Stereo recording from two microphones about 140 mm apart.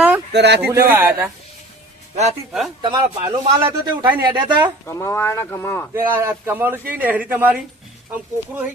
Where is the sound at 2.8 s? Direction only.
35° right (ahead or behind).